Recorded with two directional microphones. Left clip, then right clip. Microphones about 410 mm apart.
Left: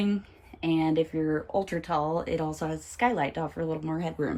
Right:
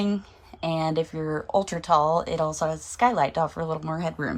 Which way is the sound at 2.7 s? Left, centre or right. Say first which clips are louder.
Right 1 dB; right.